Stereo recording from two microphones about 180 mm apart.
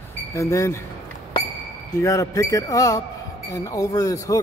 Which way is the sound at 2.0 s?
15° left (ahead or behind).